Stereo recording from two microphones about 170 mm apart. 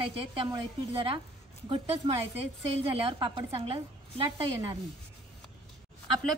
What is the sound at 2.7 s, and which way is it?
A woman's voice, 30° right (ahead or behind).